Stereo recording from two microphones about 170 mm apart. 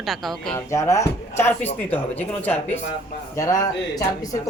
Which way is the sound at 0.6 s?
15° left (ahead or behind).